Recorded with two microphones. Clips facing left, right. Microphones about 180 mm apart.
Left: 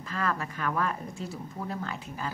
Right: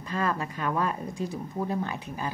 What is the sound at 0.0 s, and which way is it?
Speech, 20° right (ahead or behind).